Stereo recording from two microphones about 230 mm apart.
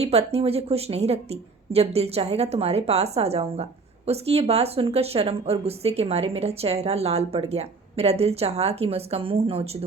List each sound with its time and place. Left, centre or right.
0.0 s a woman's voice: right